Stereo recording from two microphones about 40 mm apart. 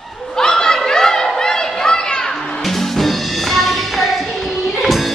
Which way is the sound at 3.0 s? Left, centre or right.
Centre.